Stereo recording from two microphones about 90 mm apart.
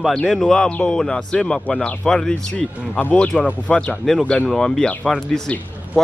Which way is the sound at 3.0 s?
15° left (ahead or behind).